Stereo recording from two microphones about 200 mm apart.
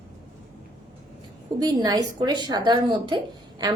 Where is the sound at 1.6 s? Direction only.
20° right (ahead or behind).